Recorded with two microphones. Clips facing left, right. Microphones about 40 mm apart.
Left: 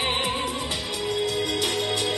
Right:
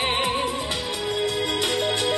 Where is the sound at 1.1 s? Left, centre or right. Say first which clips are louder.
Right 1 dB; right.